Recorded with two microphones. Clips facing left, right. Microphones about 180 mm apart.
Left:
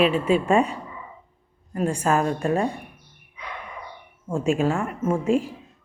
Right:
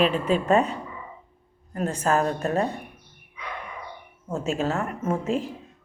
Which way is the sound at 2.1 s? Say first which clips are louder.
Even; 40° right (ahead or behind).